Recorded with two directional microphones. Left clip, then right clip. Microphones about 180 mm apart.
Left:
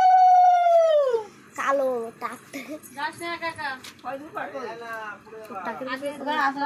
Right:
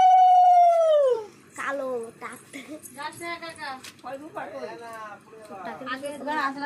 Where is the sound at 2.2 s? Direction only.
20° left (ahead or behind).